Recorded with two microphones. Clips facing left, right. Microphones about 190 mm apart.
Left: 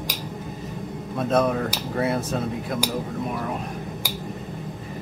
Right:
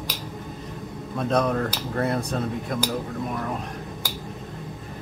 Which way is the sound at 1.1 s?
5° left (ahead or behind).